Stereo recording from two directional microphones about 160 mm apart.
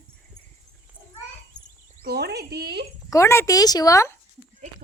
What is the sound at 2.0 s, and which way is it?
Speech, 85° right.